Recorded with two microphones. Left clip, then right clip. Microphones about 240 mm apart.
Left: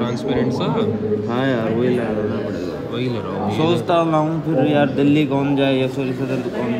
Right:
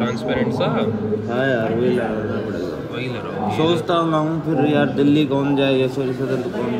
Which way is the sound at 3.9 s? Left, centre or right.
Left.